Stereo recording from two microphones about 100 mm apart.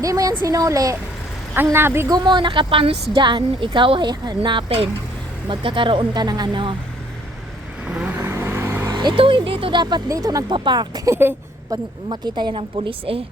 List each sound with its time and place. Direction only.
0.0 s a woman's voice: 35° right (ahead or behind)
1.6 s speech: 25° right (ahead or behind)
2.0 s speech: 45° right (ahead or behind); by 3.2 s 70° right (ahead or behind)
3.2 s speech: 50° right (ahead or behind)
5.5 s speech: 55° right (ahead or behind)
7.9 s vehicle: 15° right (ahead or behind)
8.9 s speech: 50° right (ahead or behind)
10.1 s a woman's voice: 35° right (ahead or behind)
10.5 s speech: 50° right (ahead or behind)
11.1 s speech: 20° right (ahead or behind)
11.7 s a woman's voice: 35° right (ahead or behind)
12.0 s speech: 50° right (ahead or behind)
12.9 s a woman's voice: 70° right (ahead or behind)